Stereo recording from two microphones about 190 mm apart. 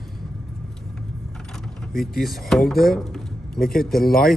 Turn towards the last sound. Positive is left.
turn(degrees=0)  # may be behind; listen again after turning